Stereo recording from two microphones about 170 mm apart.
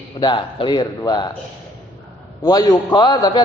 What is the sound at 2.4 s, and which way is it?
A man's voice, 20° left (ahead or behind).